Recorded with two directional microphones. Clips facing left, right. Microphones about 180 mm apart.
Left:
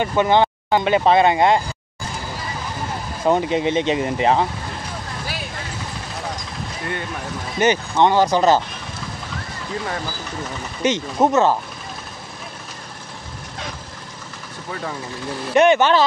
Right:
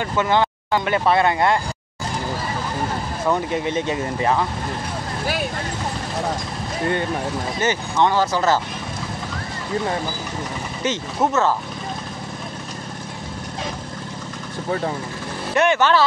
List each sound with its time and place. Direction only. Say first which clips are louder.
0.0 s speech: left 3 dB; 20° left (ahead or behind)
3.3 s speech: left 4 dB; 20° left (ahead or behind)
7.6 s speech: left 4 dB; 20° left (ahead or behind)
10.8 s speech: left 4 dB; 20° left (ahead or behind)
14.7 s speech: right 6 dB; 30° right (ahead or behind)
15.5 s speech: left 3 dB; 20° left (ahead or behind)